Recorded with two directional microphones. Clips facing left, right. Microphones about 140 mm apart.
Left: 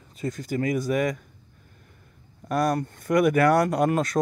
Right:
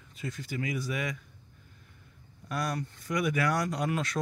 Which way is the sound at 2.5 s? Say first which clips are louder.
Left 9 dB; 50° left (ahead or behind).